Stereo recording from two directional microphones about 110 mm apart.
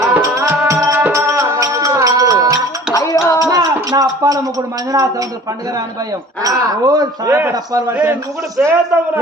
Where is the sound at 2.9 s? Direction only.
30° left (ahead or behind).